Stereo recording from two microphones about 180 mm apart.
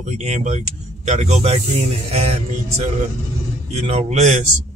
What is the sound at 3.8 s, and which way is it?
Speech, 35° right (ahead or behind).